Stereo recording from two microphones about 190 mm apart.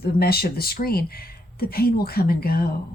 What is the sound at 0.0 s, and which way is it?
Speech, 55° left (ahead or behind).